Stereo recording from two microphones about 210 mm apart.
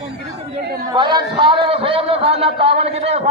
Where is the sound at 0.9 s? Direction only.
20° right (ahead or behind).